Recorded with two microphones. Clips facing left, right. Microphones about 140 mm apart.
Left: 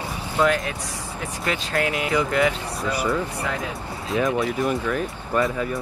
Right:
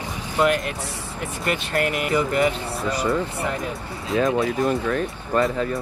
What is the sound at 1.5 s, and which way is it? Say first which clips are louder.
Speech: right 1 dB; 55° right (ahead or behind).